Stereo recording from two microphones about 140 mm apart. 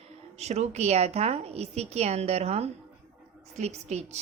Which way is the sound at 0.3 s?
50° right (ahead or behind).